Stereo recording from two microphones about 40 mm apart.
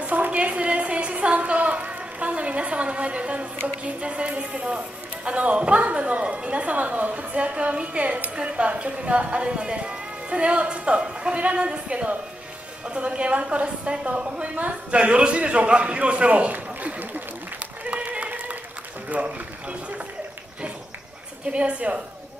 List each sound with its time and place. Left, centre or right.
0.0 s a sound: right
3.6 s a woman's voice: right
16.5 s run: right
17.8 s applause: right
19.0 s a woman's voice: right
21.5 s a woman's voice: right